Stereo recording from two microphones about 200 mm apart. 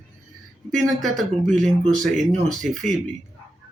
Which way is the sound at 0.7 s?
Centre (ahead or behind).